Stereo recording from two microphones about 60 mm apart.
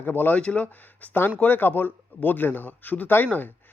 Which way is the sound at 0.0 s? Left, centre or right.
Left.